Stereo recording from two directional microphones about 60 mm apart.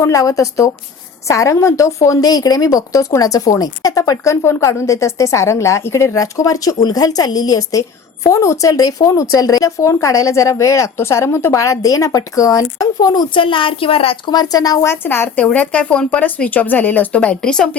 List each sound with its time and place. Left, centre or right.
0.0 s a woman's voice: left
6.1 s speech: left
7.8 s a woman's voice: left
8.7 s a woman's voice: left
10.9 s speech: left
11.5 s speech: left
14.5 s speech: left
15.0 s a woman's voice: left
15.4 s speech: left
17.4 s a woman's voice: centre